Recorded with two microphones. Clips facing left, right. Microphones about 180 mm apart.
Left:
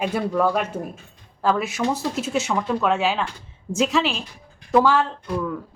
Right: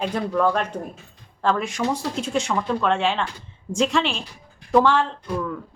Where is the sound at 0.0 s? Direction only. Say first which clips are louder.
Even; 10° left (ahead or behind).